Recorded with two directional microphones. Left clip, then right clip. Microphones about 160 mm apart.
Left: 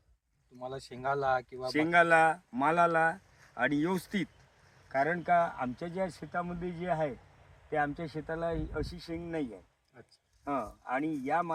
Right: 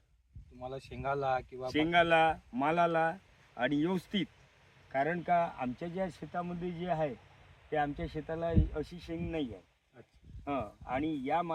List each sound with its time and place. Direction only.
0.6 s speech: 20° right (ahead or behind)
1.6 s speech: 10° right (ahead or behind)